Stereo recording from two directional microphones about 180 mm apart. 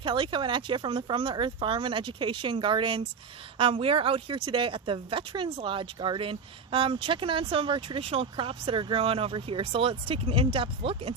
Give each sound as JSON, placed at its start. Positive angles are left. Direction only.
{"t": 0.0, "sound": "speech", "side_deg": -25}